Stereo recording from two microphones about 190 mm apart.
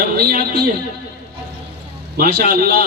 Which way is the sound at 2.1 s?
55° right (ahead or behind).